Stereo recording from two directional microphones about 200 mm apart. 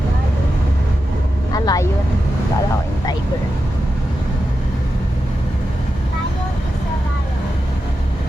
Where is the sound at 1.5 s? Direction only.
20° left (ahead or behind).